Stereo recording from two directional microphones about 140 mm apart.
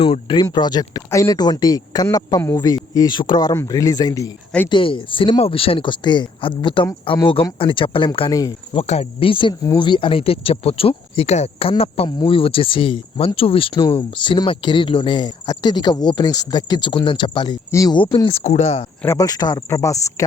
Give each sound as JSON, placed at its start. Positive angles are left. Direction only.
{"t": 0.0, "sound": "speech", "side_deg": 30}
{"t": 4.7, "sound": "speech", "side_deg": 35}
{"t": 8.3, "sound": "speech", "side_deg": 25}
{"t": 8.7, "sound": "speech", "side_deg": 45}
{"t": 11.7, "sound": "speech", "side_deg": 40}
{"t": 17.7, "sound": "speech", "side_deg": 20}
{"t": 17.9, "sound": "speech", "side_deg": 35}
{"t": 19.0, "sound": "speech", "side_deg": 25}